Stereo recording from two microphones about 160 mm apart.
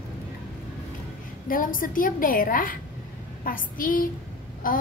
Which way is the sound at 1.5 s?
60° left (ahead or behind).